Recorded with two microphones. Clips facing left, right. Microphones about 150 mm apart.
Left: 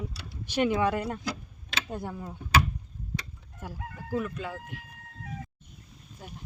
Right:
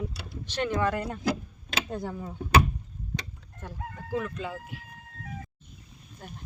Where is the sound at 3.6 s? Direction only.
10° left (ahead or behind).